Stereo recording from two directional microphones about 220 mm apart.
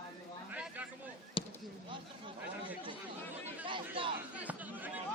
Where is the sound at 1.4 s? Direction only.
25° left (ahead or behind).